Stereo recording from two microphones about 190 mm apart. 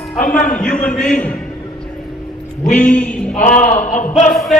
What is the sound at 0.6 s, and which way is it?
Speech, 5° left (ahead or behind).